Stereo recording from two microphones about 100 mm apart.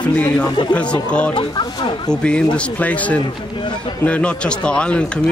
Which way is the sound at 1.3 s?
50° left (ahead or behind).